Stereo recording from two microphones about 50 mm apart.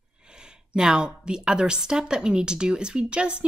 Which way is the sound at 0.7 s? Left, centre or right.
Centre.